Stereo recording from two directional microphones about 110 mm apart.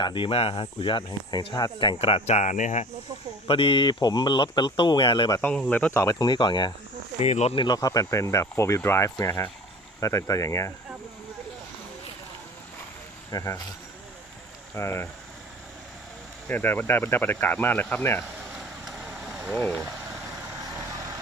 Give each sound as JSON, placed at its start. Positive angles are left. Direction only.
{"t": 0.0, "sound": "speech", "side_deg": 50}
{"t": 2.0, "sound": "speech", "side_deg": 60}
{"t": 3.4, "sound": "speech", "side_deg": 50}
{"t": 5.7, "sound": "speech", "side_deg": 15}
{"t": 6.0, "sound": "speech", "side_deg": 40}
{"t": 7.2, "sound": "speech", "side_deg": 70}
{"t": 7.5, "sound": "speech", "side_deg": 40}
{"t": 13.3, "sound": "speech", "side_deg": 30}
{"t": 14.7, "sound": "speech", "side_deg": 20}
{"t": 16.4, "sound": "speech", "side_deg": 20}
{"t": 18.6, "sound": "vehicle", "side_deg": -5}